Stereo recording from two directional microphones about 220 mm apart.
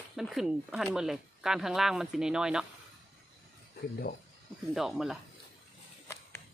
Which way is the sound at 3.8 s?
45° left (ahead or behind).